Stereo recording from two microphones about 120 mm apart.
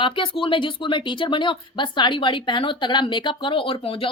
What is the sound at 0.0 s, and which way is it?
Speech, 45° left (ahead or behind).